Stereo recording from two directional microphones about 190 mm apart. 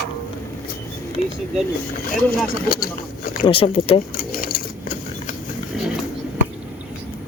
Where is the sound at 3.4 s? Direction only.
30° left (ahead or behind).